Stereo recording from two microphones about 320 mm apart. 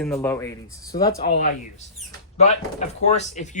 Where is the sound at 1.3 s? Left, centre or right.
Left.